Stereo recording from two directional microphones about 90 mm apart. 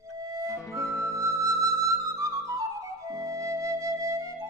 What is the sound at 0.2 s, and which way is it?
Music, 40° right (ahead or behind).